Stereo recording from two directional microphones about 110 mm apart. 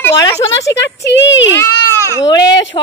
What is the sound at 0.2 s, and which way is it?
Speech, 30° left (ahead or behind).